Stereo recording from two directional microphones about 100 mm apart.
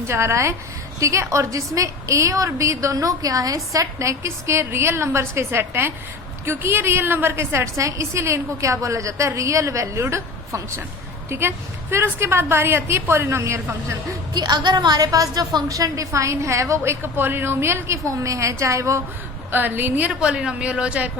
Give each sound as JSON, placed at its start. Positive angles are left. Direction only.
{"t": 0.1, "sound": "a woman's voice", "side_deg": -25}
{"t": 14.3, "sound": "a woman's voice", "side_deg": -45}
{"t": 19.5, "sound": "a woman's voice", "side_deg": -20}